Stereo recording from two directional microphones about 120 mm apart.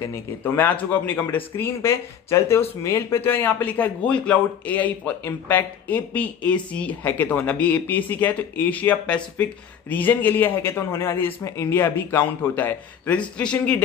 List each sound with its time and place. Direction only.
0.1 s a man's voice: 15° left (ahead or behind)